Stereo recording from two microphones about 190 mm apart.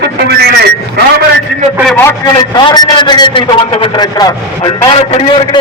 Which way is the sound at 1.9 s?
10° left (ahead or behind).